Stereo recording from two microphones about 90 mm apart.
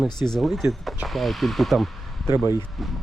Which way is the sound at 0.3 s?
Centre (ahead or behind).